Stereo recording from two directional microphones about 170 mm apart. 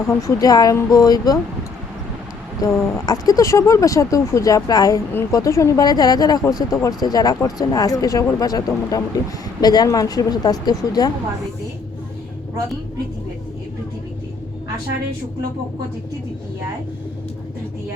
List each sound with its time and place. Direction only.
0.1 s speech: 15° left (ahead or behind)
2.6 s speech: 20° left (ahead or behind)